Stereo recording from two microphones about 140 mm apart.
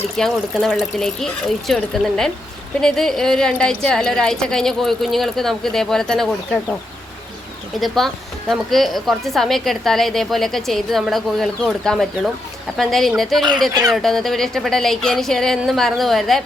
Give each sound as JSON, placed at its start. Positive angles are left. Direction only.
{"t": 0.2, "sound": "a woman's voice", "side_deg": 0}
{"t": 7.8, "sound": "a woman's voice", "side_deg": 0}